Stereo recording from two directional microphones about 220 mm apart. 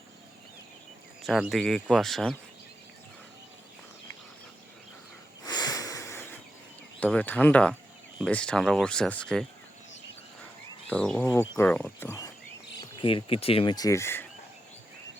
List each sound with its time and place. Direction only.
1.2 s speech: centre (ahead or behind)
5.5 s a sound: 20° left (ahead or behind)
7.0 s speech: 5° left (ahead or behind)
10.8 s speech: 5° left (ahead or behind)
13.0 s speech: 25° left (ahead or behind)